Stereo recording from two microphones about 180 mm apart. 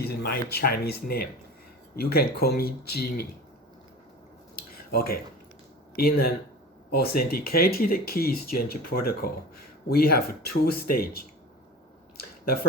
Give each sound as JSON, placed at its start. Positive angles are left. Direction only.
{"t": 0.0, "sound": "speech", "side_deg": 60}
{"t": 4.7, "sound": "a sound", "side_deg": 60}
{"t": 6.0, "sound": "speech", "side_deg": 55}